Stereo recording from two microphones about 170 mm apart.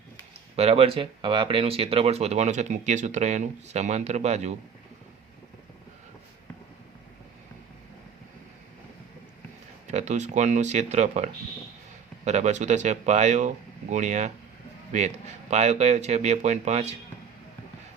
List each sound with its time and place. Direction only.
0.5 s speech: 35° right (ahead or behind)
9.8 s speech: 45° right (ahead or behind)